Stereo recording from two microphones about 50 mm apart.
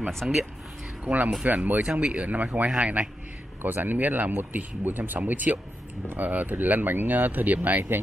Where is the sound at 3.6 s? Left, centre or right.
Right.